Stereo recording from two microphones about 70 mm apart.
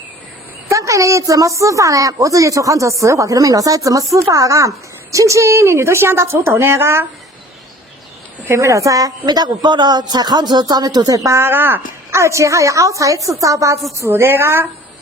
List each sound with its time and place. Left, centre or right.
0.7 s a woman's voice: right
8.5 s speech: right
11.4 s a woman's voice: right
12.1 s a woman's voice: right
14.0 s a woman's voice: right